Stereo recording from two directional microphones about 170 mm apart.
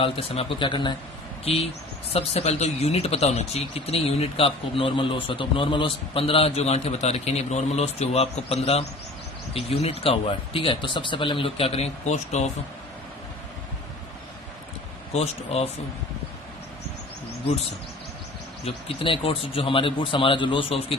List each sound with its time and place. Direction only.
0.0 s speech: 35° left (ahead or behind)
15.1 s speech: 40° left (ahead or behind)
18.6 s speech: 35° left (ahead or behind)